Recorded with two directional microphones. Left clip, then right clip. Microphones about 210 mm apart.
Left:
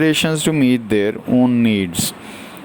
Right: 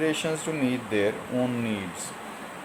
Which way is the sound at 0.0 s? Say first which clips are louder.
Left 10 dB; 45° left (ahead or behind).